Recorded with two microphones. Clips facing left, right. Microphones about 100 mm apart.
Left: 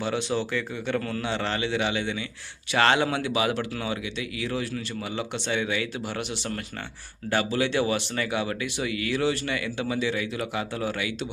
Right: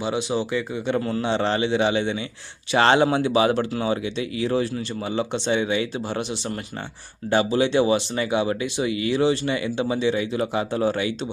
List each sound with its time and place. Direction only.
0.0 s speech: 15° right (ahead or behind)
7.3 s speech: 20° right (ahead or behind)